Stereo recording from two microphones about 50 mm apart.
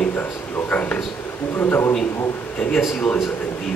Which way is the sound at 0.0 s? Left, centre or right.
Left.